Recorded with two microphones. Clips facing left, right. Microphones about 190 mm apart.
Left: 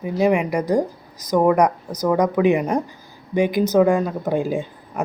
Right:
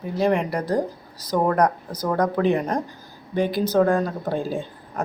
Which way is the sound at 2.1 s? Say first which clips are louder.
Left 3 dB; 10° left (ahead or behind).